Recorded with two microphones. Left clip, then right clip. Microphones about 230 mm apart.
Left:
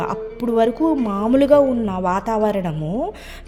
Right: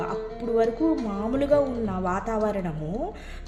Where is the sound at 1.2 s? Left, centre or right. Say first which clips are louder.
Left 9 dB; left.